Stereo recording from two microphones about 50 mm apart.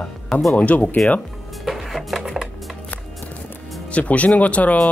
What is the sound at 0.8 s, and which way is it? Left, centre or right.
Speech, centre.